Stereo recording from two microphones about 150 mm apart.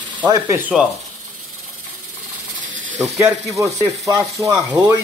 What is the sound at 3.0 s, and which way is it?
Speech, 5° right (ahead or behind).